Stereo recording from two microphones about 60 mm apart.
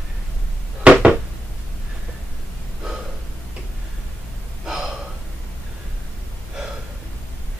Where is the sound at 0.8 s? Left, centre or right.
Right.